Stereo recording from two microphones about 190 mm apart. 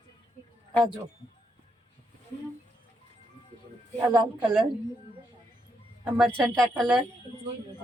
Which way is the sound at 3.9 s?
20° right (ahead or behind).